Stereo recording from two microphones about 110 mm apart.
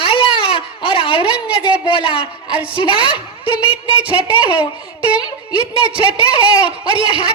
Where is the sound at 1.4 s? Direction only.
10° right (ahead or behind).